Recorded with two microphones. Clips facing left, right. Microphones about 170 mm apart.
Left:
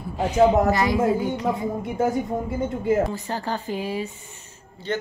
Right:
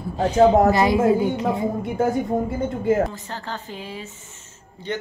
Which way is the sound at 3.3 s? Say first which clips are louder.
Left 5 dB; 10° left (ahead or behind).